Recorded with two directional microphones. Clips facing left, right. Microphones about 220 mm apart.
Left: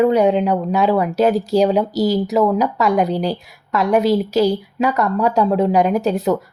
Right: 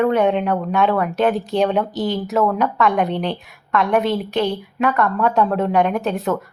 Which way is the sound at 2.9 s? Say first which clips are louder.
Left 3 dB; 40° left (ahead or behind).